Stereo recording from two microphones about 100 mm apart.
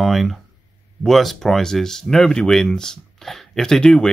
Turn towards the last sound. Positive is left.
turn(degrees=5)  # may be behind; listen again after turning